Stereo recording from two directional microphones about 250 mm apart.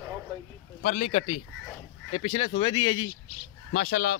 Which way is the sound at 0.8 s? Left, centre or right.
Left.